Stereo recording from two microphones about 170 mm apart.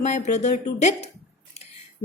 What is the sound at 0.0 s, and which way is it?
A woman's voice, 40° left (ahead or behind).